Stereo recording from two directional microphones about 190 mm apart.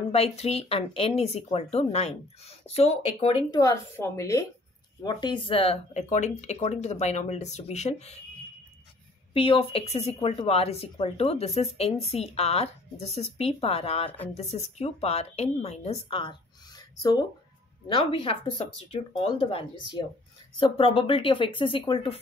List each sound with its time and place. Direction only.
0.1 s speech: 35° left (ahead or behind)
9.3 s speech: 30° left (ahead or behind)